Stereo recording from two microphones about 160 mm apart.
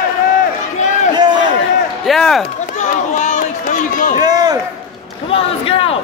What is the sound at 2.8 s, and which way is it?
Run, 50° left (ahead or behind).